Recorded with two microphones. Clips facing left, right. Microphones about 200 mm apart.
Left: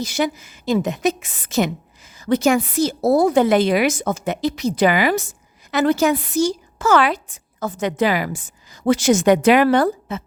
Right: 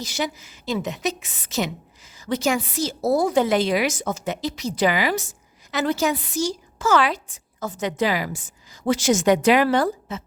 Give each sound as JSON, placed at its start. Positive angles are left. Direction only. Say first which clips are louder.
{"t": 0.0, "sound": "a woman's voice", "louder": "left 6 dB", "side_deg": 55}